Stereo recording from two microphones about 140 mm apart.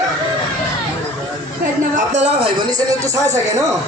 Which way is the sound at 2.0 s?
55° right (ahead or behind).